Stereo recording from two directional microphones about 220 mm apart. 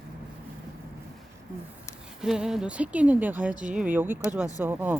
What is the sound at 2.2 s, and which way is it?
Speech, centre (ahead or behind).